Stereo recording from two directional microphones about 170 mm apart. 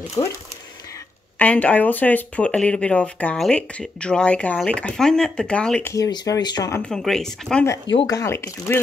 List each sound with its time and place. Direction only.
0.2 s speech: 20° left (ahead or behind)
1.4 s speech: 10° left (ahead or behind)
6.9 s speech: 5° left (ahead or behind)
7.9 s speech: 30° left (ahead or behind)
8.2 s speech: 15° left (ahead or behind)